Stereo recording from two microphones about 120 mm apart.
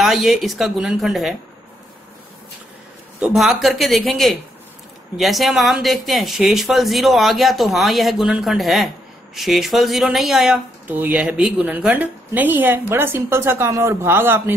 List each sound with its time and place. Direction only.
0.0 s speech: centre (ahead or behind)
3.2 s speech: centre (ahead or behind)
10.9 s a woman's voice: 15° right (ahead or behind)